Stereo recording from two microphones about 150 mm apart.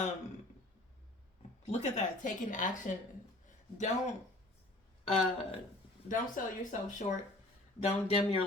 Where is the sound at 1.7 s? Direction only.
50° left (ahead or behind).